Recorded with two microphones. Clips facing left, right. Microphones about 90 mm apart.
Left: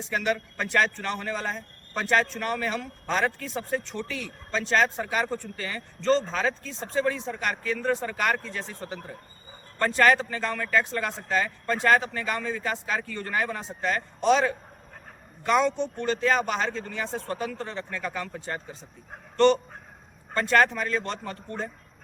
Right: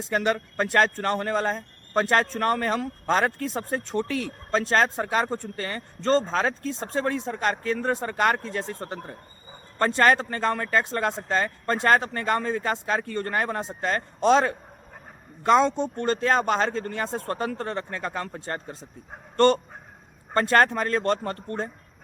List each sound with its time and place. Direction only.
0.1 s speech: 40° right (ahead or behind)
20.3 s speech: 45° right (ahead or behind)